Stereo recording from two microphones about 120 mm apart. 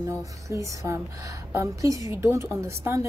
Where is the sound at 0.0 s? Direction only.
25° right (ahead or behind).